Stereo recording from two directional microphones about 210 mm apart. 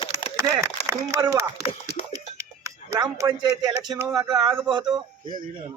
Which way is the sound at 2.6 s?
15° right (ahead or behind).